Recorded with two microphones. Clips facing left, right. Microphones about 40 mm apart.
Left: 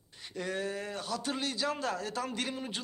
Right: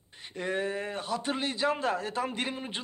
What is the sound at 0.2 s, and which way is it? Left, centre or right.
Speech, right.